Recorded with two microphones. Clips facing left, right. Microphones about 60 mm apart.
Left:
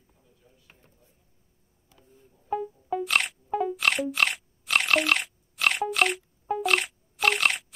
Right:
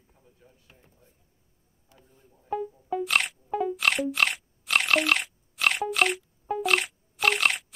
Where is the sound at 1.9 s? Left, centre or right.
Right.